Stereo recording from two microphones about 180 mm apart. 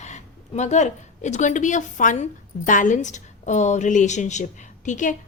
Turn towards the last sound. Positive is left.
turn(degrees=45)  # may be behind; listen again after turning